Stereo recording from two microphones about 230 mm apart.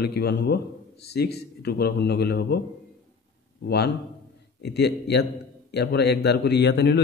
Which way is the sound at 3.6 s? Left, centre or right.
Left.